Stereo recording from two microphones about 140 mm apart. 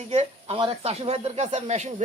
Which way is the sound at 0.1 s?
45° right (ahead or behind).